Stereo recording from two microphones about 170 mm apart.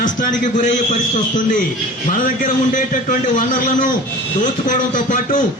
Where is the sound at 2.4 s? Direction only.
50° left (ahead or behind).